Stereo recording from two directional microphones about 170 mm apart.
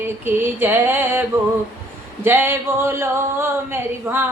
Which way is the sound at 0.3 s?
10° right (ahead or behind).